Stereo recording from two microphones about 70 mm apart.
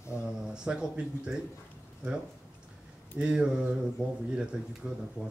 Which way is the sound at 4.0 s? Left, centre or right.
Left.